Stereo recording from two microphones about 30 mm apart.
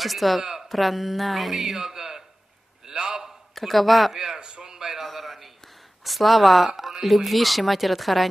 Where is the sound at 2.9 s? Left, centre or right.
Right.